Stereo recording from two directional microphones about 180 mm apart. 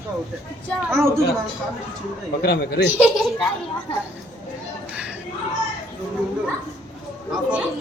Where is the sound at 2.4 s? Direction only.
60° left (ahead or behind).